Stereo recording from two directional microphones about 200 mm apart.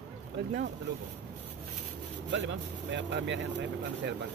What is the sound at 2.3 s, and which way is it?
Speech, 65° right (ahead or behind).